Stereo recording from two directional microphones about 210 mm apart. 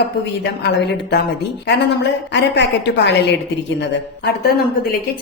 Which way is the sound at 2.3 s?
55° left (ahead or behind).